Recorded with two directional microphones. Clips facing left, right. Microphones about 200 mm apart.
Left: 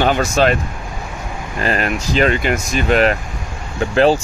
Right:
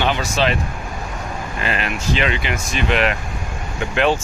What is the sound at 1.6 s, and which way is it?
Speech, 40° left (ahead or behind).